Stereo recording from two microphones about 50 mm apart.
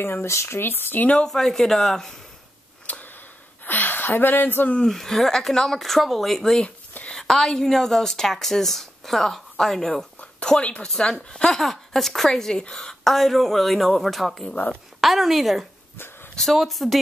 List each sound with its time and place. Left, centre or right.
0.0 s speech: left
1.2 s speech: centre
2.9 s a sound: left
4.8 s a woman's voice: centre
10.6 s speech: left
11.0 s speech: centre
13.0 s a woman's voice: centre